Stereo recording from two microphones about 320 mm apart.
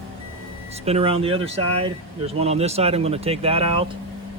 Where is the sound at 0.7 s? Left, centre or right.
Centre.